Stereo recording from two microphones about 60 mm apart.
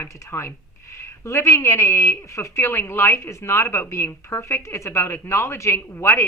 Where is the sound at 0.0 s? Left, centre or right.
Left.